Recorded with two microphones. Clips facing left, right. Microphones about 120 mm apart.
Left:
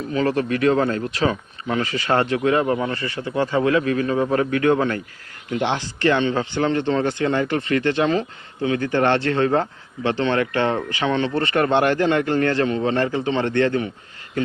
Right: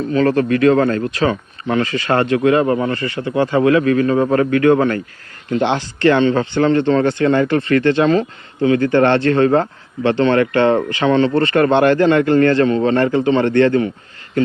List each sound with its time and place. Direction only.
0.1 s a man's voice: 65° right (ahead or behind)